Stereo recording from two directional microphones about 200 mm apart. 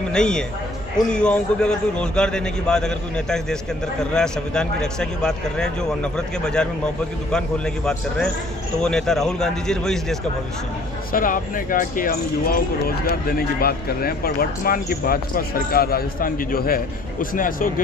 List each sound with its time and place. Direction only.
0.1 s a man's voice: 5° left (ahead or behind)
11.1 s speech: 45° left (ahead or behind)